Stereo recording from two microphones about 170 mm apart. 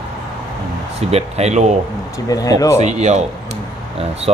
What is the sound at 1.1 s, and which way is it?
Speech, 40° right (ahead or behind).